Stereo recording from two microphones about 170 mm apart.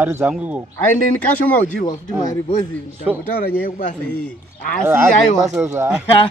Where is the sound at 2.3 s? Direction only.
20° left (ahead or behind).